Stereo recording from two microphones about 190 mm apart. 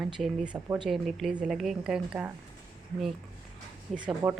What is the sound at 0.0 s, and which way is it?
A woman's voice, 5° right (ahead or behind).